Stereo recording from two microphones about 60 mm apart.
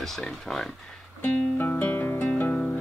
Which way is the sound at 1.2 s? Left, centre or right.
Left.